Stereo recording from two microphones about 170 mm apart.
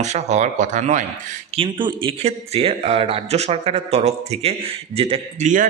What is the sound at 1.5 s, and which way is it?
Speech, 30° right (ahead or behind).